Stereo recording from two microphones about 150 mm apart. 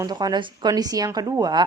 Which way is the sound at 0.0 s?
25° right (ahead or behind).